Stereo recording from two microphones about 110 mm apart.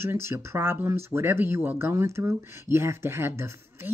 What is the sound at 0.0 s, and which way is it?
Speech, 25° right (ahead or behind).